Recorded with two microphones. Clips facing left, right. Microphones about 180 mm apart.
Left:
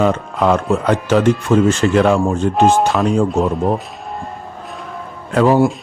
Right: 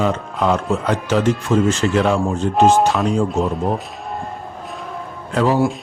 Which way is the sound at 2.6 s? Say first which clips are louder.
Even; 5° right (ahead or behind).